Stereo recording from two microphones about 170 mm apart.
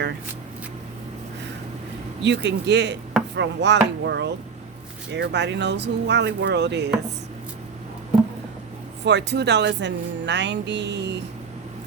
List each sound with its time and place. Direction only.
2.2 s speech: 90° right
9.0 s speech: 85° right